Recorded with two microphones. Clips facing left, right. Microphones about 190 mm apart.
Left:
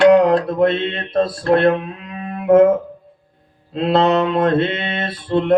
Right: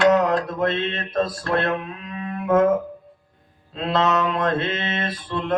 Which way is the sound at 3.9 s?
35° left (ahead or behind).